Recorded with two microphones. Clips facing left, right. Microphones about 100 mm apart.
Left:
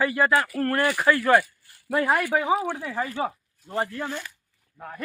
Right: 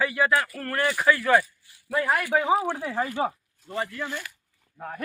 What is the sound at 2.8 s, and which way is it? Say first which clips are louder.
Speech: right 1 dB; 15° right (ahead or behind).